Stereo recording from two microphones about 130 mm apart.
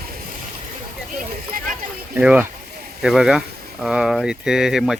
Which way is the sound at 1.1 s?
90° right.